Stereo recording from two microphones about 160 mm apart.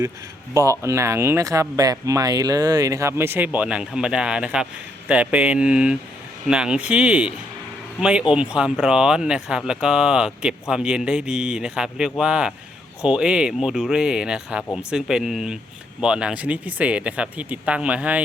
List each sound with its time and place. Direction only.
0.5 s speech: 20° right (ahead or behind)